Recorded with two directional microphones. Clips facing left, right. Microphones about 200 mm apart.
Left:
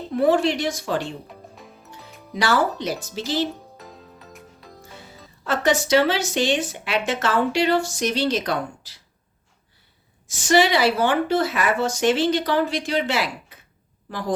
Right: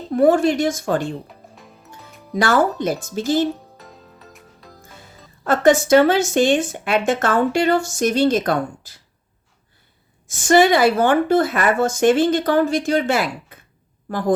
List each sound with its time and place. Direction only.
0.1 s speech: 45° right (ahead or behind)
1.5 s music: centre (ahead or behind)
2.3 s speech: 50° right (ahead or behind)
3.8 s music: centre (ahead or behind)
5.4 s speech: 50° right (ahead or behind)
10.2 s speech: 50° right (ahead or behind)